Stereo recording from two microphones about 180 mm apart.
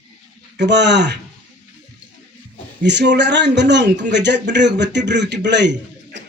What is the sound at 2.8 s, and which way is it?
A man's voice, 75° right (ahead or behind).